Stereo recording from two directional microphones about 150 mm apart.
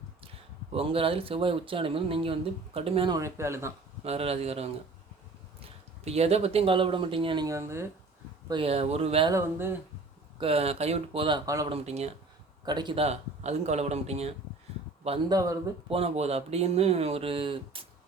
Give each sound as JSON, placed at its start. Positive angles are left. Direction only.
{"t": 0.7, "sound": "speech", "side_deg": -40}
{"t": 3.1, "sound": "speech", "side_deg": -20}
{"t": 4.0, "sound": "speech", "side_deg": -45}
{"t": 7.4, "sound": "speech", "side_deg": -20}
{"t": 8.4, "sound": "speech", "side_deg": -35}
{"t": 9.3, "sound": "speech", "side_deg": -15}
{"t": 10.4, "sound": "speech", "side_deg": -40}
{"t": 11.7, "sound": "speech", "side_deg": -45}
{"t": 12.6, "sound": "speech", "side_deg": -30}
{"t": 13.1, "sound": "speech", "side_deg": -50}
{"t": 15.3, "sound": "speech", "side_deg": -25}
{"t": 15.9, "sound": "speech", "side_deg": -40}